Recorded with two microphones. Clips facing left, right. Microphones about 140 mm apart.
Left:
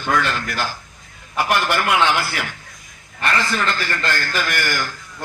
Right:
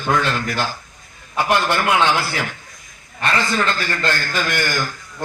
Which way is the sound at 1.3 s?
20° right (ahead or behind).